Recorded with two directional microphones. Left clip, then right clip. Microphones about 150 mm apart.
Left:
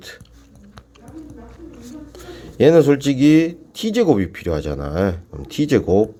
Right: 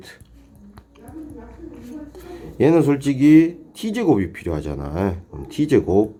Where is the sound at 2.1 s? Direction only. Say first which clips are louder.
Left 3 dB; 30° left (ahead or behind).